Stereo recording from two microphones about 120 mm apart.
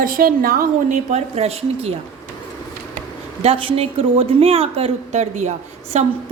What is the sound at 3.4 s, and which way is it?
Speech, 50° right (ahead or behind).